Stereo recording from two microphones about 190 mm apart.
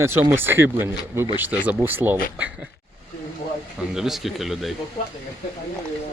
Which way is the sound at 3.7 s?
Centre (ahead or behind).